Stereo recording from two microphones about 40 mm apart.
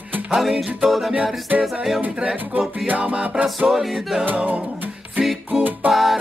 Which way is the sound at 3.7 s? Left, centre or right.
Centre.